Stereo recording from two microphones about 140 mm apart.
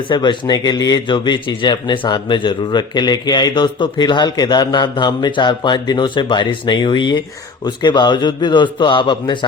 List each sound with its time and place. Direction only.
0.1 s speech: 35° left (ahead or behind)